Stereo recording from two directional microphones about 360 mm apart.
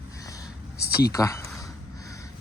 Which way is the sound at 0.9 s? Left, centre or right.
Left.